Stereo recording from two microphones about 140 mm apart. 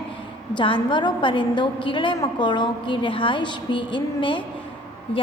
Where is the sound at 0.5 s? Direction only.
35° left (ahead or behind).